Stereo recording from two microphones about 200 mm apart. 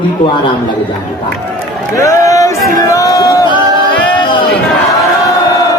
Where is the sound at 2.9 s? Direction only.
15° left (ahead or behind).